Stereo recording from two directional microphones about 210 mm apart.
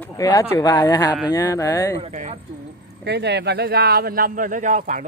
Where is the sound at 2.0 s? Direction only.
35° right (ahead or behind).